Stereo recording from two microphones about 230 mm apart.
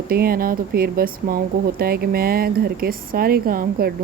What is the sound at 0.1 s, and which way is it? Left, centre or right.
A woman's voice, right.